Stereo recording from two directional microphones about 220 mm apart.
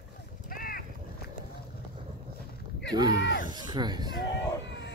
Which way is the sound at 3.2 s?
55° left (ahead or behind).